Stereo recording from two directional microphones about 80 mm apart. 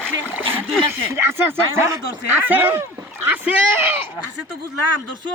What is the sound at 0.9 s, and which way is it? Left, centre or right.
Speech, right.